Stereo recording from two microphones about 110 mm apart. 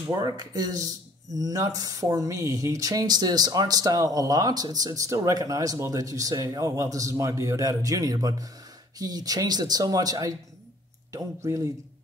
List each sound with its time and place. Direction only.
0.1 s speech: 40° right (ahead or behind)